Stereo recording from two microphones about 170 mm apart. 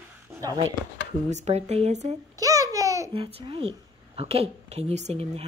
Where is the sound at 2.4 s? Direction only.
20° right (ahead or behind).